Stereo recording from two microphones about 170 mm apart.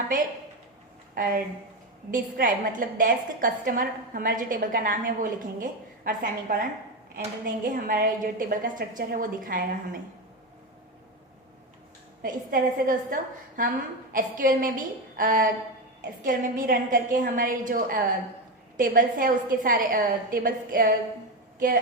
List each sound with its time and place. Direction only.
1.1 s a woman's voice: 55° right (ahead or behind)
12.2 s a woman's voice: 55° right (ahead or behind)